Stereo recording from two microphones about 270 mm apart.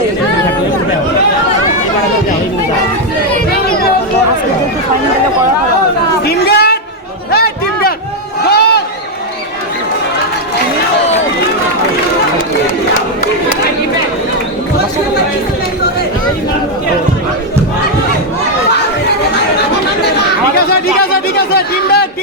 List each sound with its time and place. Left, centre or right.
6.2 s chatter: left
7.3 s a sound: left
21.3 s chatter: left